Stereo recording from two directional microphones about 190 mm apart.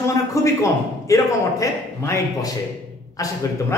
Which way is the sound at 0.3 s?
15° left (ahead or behind).